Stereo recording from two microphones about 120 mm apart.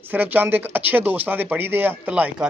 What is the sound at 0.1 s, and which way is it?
Speech, 15° right (ahead or behind).